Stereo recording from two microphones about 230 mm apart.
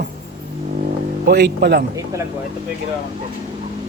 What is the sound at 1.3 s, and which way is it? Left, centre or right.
Speech, right.